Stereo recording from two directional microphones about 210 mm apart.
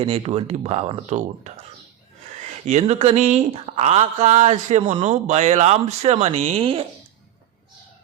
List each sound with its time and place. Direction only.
0.0 s speech: 25° right (ahead or behind)
2.6 s speech: 35° right (ahead or behind)